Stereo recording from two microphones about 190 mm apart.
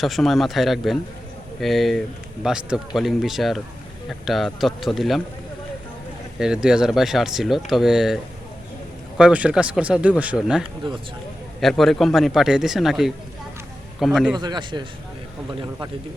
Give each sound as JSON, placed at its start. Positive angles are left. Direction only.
{"t": 0.0, "sound": "speech", "side_deg": 0}
{"t": 6.4, "sound": "speech", "side_deg": -5}
{"t": 14.3, "sound": "a man's voice", "side_deg": -20}